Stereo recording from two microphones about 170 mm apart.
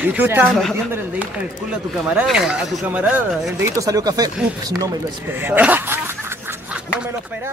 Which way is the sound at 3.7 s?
20° right (ahead or behind).